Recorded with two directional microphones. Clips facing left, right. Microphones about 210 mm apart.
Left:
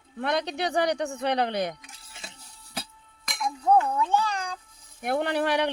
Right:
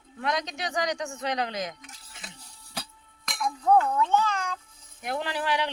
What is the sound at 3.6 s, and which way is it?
Dishes, 15° left (ahead or behind).